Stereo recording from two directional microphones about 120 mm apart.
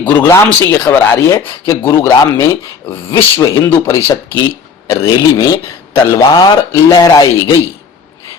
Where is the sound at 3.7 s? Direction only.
20° left (ahead or behind).